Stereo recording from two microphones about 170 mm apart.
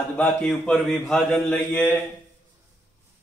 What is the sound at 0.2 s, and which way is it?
Speech, 5° left (ahead or behind).